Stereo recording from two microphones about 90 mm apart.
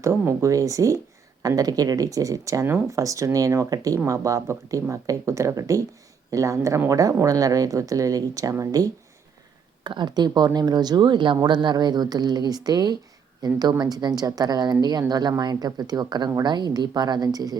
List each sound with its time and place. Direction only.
0.0 s speech: 30° right (ahead or behind)
2.6 s speech: 25° right (ahead or behind)
2.9 s speech: 35° right (ahead or behind)
9.8 s speech: 60° right (ahead or behind)